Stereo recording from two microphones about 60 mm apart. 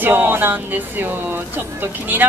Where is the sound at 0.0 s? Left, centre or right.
Right.